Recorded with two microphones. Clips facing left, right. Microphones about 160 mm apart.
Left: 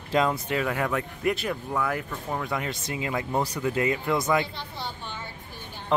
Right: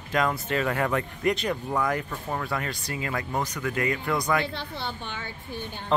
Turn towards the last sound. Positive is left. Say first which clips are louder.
# left 1 dB
turn(degrees=20)  # may be behind; listen again after turning